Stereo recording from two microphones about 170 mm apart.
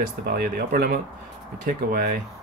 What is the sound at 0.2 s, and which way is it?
Speech, 65° right (ahead or behind).